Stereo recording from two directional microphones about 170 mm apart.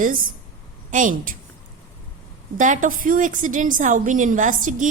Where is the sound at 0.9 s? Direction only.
50° right (ahead or behind).